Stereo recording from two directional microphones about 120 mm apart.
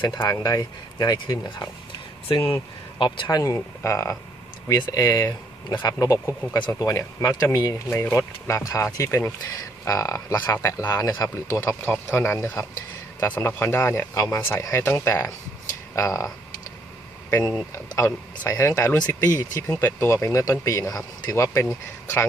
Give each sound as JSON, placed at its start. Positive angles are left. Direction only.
{"t": 0.1, "sound": "speech", "side_deg": 35}
{"t": 2.3, "sound": "speech", "side_deg": 50}
{"t": 3.2, "sound": "speech", "side_deg": 30}
{"t": 17.9, "sound": "speech", "side_deg": 25}